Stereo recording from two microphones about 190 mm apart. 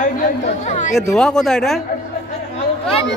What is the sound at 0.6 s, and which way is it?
Speech, 40° left (ahead or behind).